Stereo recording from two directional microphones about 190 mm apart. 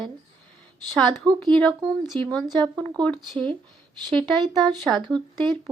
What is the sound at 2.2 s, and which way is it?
Speech, 5° left (ahead or behind).